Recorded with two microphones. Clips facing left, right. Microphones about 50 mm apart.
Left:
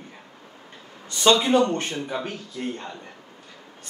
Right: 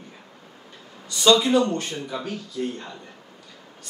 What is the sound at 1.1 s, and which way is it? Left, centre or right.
Speech, left.